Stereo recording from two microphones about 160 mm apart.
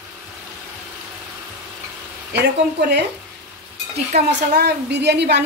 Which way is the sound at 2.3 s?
90° right.